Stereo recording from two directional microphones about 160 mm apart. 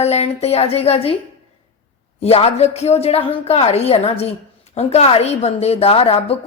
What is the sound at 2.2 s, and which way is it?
A woman's voice, 40° left (ahead or behind).